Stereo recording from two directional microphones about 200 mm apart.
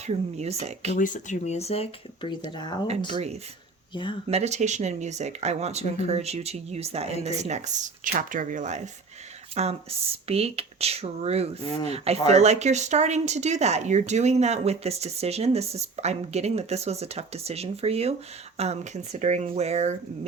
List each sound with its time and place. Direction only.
0.0 s speech: 30° right (ahead or behind)
0.9 s speech: 40° left (ahead or behind); by 2.7 s 20° left (ahead or behind)
3.1 s speech: 30° right (ahead or behind)
3.9 s speech: 25° left (ahead or behind)
4.3 s speech: 35° right (ahead or behind)